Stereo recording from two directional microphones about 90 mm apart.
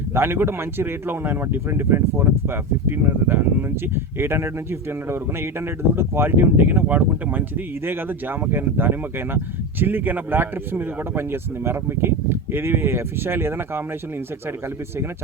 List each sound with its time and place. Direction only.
0.1 s speech: 25° right (ahead or behind)